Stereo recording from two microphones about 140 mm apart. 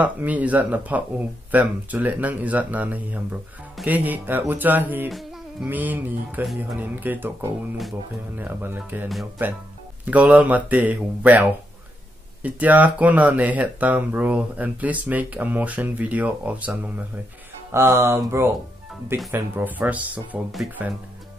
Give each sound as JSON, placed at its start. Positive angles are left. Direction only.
{"t": 0.0, "sound": "speech", "side_deg": -10}
{"t": 8.4, "sound": "speech", "side_deg": -15}